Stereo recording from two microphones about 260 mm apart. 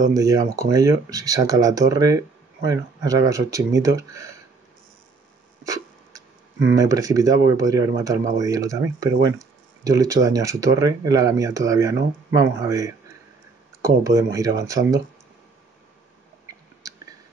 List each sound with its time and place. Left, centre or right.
0.1 s speech: centre
5.6 s speech: centre